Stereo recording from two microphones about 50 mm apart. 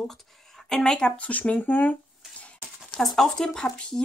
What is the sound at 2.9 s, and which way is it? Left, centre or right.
Speech, centre.